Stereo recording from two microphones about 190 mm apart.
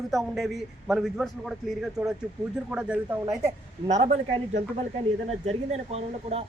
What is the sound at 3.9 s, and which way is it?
Speech, 35° right (ahead or behind).